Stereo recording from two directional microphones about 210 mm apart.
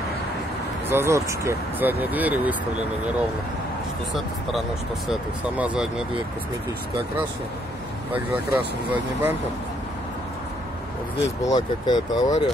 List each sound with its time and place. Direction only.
0.8 s speech: 10° right (ahead or behind)
5.1 s speech: 5° right (ahead or behind)
8.1 s speech: 10° right (ahead or behind)
11.4 s speech: 20° left (ahead or behind)